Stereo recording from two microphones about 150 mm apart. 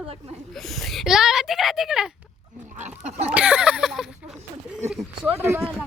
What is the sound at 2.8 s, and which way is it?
Chicken, 50° right (ahead or behind).